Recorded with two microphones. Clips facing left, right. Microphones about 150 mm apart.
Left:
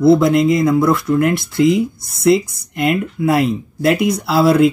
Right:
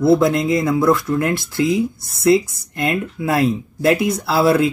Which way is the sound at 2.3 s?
15° left (ahead or behind).